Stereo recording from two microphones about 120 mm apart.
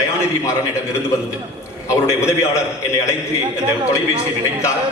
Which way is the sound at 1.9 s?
25° left (ahead or behind).